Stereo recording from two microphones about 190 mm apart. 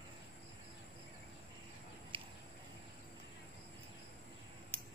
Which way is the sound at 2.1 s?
30° right (ahead or behind).